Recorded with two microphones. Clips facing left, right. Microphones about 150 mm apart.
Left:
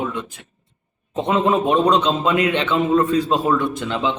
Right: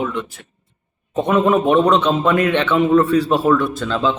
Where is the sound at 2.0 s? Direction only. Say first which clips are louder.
Right 2 dB; 55° right (ahead or behind).